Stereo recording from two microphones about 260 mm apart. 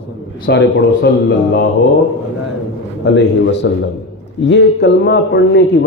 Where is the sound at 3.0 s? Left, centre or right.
Left.